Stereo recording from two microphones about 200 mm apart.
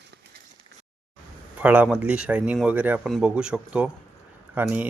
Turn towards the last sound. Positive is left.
turn(degrees=-5)  # may be behind; listen again after turning